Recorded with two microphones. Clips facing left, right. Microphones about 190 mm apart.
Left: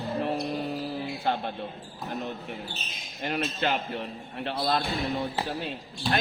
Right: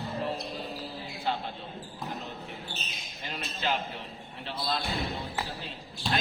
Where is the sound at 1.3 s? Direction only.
55° left (ahead or behind).